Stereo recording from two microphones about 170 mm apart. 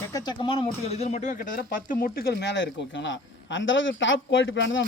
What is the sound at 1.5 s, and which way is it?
A man's voice, 60° left (ahead or behind).